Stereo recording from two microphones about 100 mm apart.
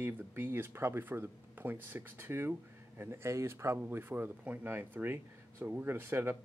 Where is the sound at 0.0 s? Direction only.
25° right (ahead or behind).